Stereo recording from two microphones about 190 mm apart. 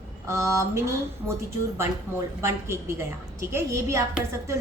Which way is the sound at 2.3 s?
15° right (ahead or behind).